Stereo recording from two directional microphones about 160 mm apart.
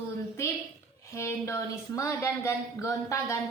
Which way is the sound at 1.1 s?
15° left (ahead or behind).